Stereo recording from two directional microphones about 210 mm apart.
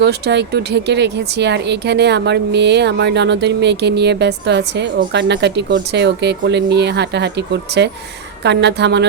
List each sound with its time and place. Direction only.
0.0 s speech: 55° right (ahead or behind)